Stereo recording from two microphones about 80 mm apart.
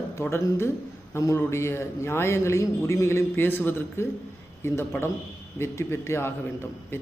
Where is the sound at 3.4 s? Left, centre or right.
Left.